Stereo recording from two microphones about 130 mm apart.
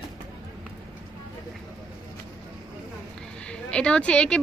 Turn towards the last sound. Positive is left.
turn(degrees=10)  # may be behind; listen again after turning